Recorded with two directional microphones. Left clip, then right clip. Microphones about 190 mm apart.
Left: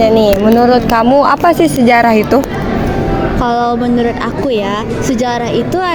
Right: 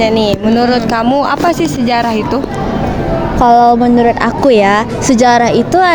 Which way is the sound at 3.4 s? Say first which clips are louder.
Right 9 dB; 40° right (ahead or behind).